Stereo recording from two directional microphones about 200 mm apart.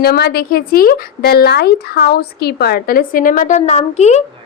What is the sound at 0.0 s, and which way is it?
Speech, 50° left (ahead or behind).